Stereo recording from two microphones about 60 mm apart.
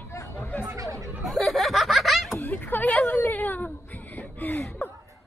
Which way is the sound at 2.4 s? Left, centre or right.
Left.